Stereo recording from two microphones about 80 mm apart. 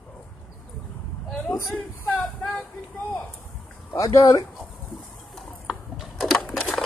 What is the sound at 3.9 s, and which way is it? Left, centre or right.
Speech, left.